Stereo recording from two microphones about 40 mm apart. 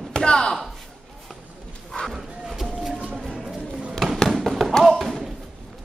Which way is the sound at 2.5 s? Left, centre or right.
Centre.